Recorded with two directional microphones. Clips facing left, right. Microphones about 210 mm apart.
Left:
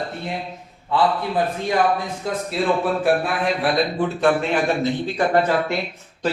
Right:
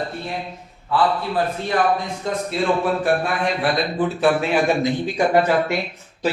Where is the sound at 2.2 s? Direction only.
5° left (ahead or behind).